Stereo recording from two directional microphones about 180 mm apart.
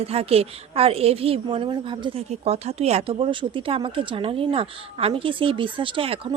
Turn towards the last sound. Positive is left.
turn(degrees=-30)  # may be behind; listen again after turning